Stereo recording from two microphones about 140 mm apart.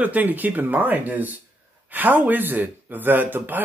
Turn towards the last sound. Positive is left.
turn(degrees=-15)  # may be behind; listen again after turning